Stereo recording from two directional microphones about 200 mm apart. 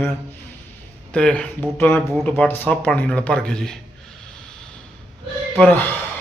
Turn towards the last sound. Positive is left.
turn(degrees=10)  # may be behind; listen again after turning